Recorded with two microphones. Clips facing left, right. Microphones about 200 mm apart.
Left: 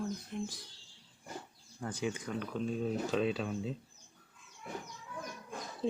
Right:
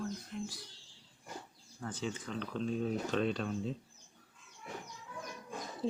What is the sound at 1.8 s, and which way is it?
Speech, 10° left (ahead or behind).